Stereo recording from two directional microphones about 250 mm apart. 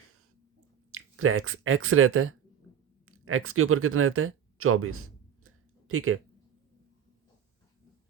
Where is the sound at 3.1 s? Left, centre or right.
Right.